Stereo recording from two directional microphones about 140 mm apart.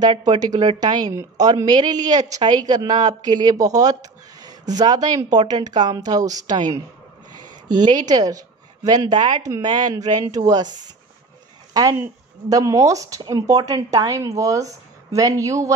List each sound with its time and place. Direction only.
0.0 s a woman's voice: 30° right (ahead or behind)
11.7 s speech: 25° right (ahead or behind)